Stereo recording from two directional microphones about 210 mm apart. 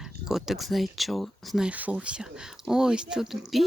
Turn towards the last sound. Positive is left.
turn(degrees=0)  # may be behind; listen again after turning